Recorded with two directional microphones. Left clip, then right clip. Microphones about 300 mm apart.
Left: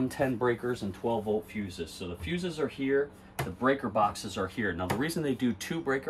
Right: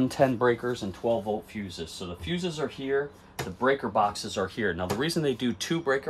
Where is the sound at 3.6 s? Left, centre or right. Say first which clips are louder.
Right 3 dB; centre.